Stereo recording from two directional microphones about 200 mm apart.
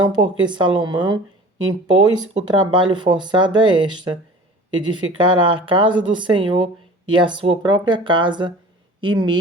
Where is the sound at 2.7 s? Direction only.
25° right (ahead or behind).